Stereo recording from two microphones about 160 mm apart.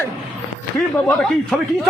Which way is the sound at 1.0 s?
5° left (ahead or behind).